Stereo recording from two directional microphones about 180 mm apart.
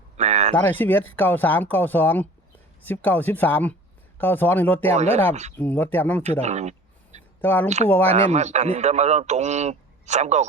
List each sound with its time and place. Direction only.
0.2 s a sound: 40° right (ahead or behind)
0.5 s speech: 10° left (ahead or behind)
4.9 s a man's voice: 35° right (ahead or behind)
5.5 s speech: 10° left (ahead or behind)
6.4 s a sound: 40° right (ahead or behind)
7.4 s speech: 10° left (ahead or behind)
8.0 s a man's voice: 35° right (ahead or behind)